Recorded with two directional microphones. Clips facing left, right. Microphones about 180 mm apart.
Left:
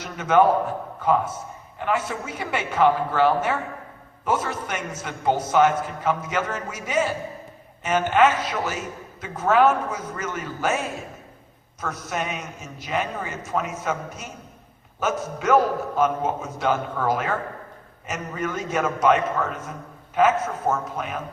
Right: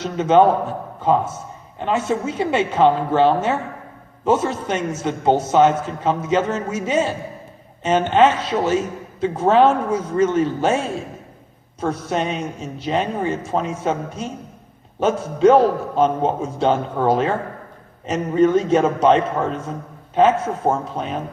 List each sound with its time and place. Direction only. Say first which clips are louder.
0.0 s a man's voice: right 4 dB; 25° right (ahead or behind)